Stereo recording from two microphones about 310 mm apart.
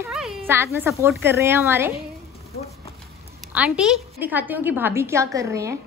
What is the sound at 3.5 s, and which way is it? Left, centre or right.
A woman's voice, centre.